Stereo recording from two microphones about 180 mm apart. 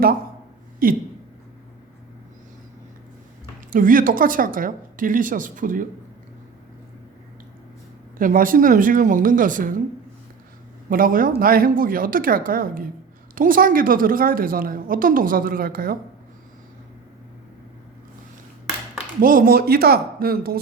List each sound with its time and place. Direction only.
0.8 s a woman's voice: 50° right (ahead or behind)
3.7 s a woman's voice: 50° right (ahead or behind)
8.2 s a woman's voice: 50° right (ahead or behind)
10.8 s a woman's voice: 50° right (ahead or behind)
19.2 s speech: 50° right (ahead or behind)